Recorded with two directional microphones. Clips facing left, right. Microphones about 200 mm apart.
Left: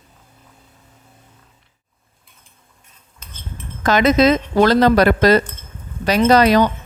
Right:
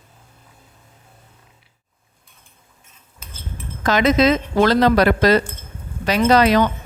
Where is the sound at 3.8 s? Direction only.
45° left (ahead or behind).